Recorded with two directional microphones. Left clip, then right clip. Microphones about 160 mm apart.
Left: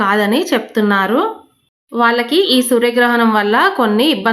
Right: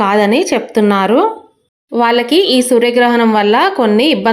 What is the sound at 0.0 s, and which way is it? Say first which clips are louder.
A woman's voice: right 3 dB; 15° right (ahead or behind).